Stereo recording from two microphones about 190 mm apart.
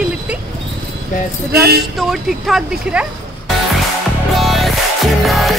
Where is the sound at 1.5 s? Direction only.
55° right (ahead or behind).